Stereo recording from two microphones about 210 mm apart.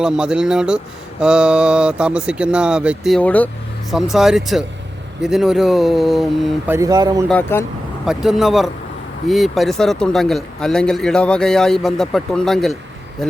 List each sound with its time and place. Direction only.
0.0 s speech: 5° right (ahead or behind)
6.7 s speech: 20° right (ahead or behind)
7.3 s speech: 5° left (ahead or behind)